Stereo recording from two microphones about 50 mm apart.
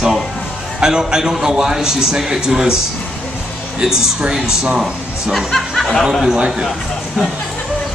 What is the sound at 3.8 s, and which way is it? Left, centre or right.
A man's voice, centre.